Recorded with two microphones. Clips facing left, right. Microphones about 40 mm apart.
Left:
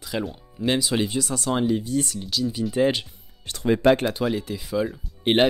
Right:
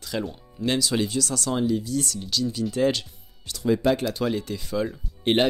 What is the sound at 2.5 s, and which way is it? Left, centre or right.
Speech, centre.